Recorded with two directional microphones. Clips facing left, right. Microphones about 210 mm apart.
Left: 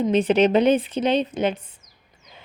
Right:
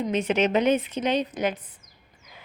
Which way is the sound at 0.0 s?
30° left (ahead or behind).